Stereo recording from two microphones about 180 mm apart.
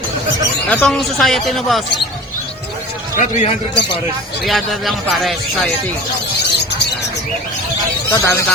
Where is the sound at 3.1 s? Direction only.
40° left (ahead or behind).